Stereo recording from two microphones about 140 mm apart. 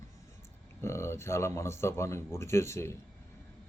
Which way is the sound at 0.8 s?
20° left (ahead or behind).